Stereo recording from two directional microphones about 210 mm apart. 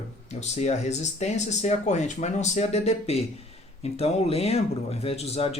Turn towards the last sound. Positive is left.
turn(degrees=30)  # may be behind; listen again after turning